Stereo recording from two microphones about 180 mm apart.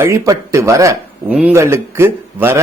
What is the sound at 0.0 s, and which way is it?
A man's voice, 15° right (ahead or behind).